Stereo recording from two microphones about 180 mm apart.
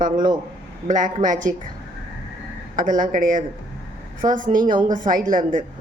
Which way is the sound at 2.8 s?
45° right (ahead or behind).